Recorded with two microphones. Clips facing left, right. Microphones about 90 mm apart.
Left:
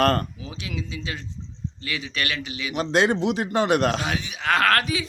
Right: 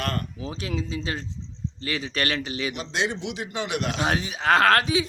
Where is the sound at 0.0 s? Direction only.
45° left (ahead or behind).